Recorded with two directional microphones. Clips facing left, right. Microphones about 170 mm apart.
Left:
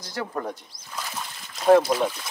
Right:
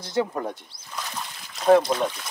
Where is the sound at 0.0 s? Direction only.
20° right (ahead or behind).